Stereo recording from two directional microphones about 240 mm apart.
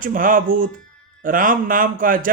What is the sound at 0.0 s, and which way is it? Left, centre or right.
A man's voice, right.